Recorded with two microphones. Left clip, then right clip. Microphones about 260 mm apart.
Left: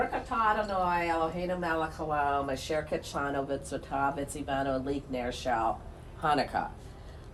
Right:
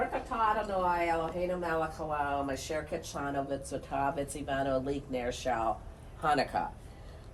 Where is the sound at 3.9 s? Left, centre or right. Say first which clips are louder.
Left 2 dB; centre.